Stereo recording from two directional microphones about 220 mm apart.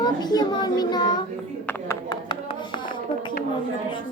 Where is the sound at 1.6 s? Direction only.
15° left (ahead or behind).